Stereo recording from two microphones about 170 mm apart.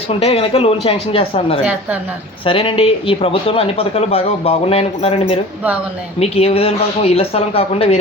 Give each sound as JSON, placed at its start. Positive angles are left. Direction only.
{"t": 0.1, "sound": "speech", "side_deg": 35}